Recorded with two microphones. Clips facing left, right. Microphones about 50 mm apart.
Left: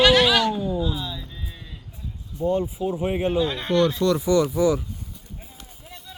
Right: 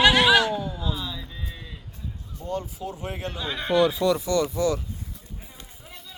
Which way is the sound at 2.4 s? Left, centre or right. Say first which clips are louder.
Left 8 dB; left.